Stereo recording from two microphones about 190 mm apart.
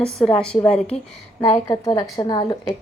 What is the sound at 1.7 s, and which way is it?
Speech, 15° left (ahead or behind).